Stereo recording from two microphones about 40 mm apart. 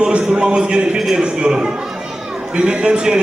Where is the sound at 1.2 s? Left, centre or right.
Right.